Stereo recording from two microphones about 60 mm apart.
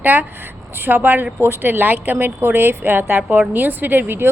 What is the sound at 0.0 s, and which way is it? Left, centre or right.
A woman's voice, right.